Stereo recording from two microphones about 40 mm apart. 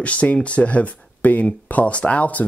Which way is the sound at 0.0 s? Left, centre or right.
Left.